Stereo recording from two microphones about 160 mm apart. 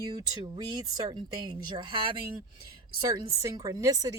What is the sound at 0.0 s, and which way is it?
Speech, 25° right (ahead or behind).